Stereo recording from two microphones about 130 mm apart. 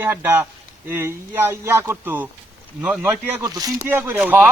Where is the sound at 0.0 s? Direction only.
15° right (ahead or behind).